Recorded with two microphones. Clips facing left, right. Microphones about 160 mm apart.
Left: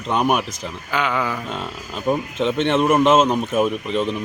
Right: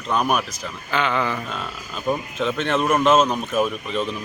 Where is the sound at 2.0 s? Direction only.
25° left (ahead or behind).